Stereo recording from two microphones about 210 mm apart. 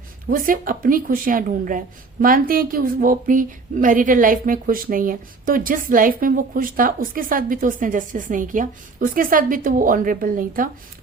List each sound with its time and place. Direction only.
0.3 s speech: 40° right (ahead or behind)